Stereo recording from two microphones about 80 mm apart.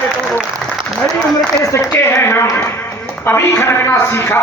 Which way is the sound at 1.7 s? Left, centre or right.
Left.